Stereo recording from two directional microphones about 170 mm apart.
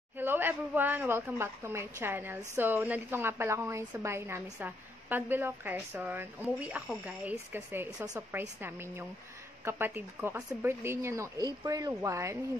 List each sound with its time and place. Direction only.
0.2 s a woman's voice: 10° right (ahead or behind)